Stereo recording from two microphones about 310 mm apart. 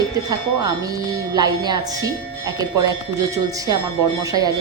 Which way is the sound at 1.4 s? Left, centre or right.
Centre.